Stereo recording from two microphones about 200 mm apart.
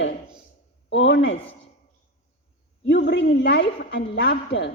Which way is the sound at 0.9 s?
60° left (ahead or behind).